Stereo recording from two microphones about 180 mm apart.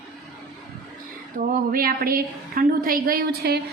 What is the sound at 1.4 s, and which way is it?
A woman's voice, 50° right (ahead or behind).